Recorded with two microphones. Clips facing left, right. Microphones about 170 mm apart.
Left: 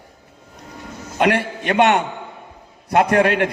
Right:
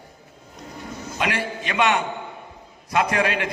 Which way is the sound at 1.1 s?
55° left (ahead or behind).